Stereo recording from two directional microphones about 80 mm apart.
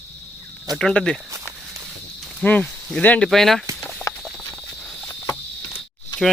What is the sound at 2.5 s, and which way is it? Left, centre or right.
Speech, centre.